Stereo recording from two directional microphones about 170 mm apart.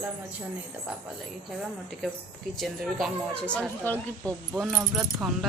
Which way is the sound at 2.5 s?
Centre (ahead or behind).